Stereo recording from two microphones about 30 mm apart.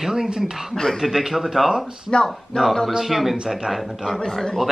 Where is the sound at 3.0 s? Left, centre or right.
Centre.